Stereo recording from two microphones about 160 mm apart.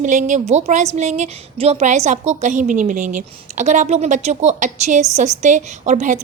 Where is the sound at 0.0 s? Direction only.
50° right (ahead or behind).